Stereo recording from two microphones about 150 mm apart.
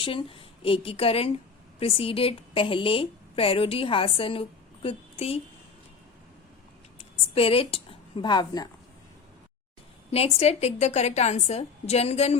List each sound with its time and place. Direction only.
0.0 s a woman's voice: 35° left (ahead or behind)
7.3 s a woman's voice: 40° left (ahead or behind)
10.1 s a woman's voice: 40° left (ahead or behind)